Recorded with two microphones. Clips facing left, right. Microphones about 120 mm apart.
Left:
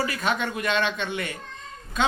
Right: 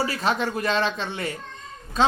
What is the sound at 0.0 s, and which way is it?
Speech, 30° right (ahead or behind).